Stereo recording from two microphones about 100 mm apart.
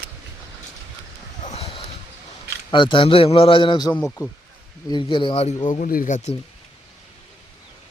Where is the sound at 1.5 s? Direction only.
75° left (ahead or behind).